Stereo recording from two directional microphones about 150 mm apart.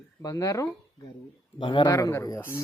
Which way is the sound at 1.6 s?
35° left (ahead or behind).